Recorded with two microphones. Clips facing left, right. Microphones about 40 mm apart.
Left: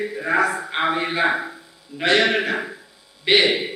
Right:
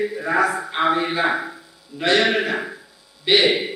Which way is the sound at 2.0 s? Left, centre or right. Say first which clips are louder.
Even; centre.